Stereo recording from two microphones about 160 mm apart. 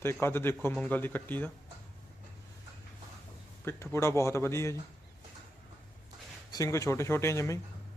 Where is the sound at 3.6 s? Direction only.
15° left (ahead or behind).